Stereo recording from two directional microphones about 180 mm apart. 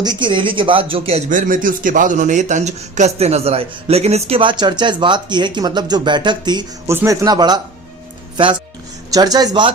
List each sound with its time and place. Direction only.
0.0 s a man's voice: 25° right (ahead or behind)
9.1 s a man's voice: 20° right (ahead or behind)